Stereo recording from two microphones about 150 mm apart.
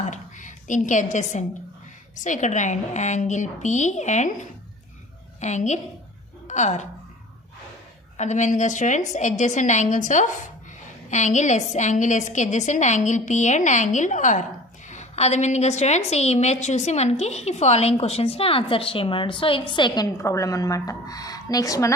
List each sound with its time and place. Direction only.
0.0 s a woman's voice: 55° left (ahead or behind)
8.1 s a woman's voice: 50° left (ahead or behind); by 20.1 s 30° left (ahead or behind)
20.1 s speech: 20° left (ahead or behind)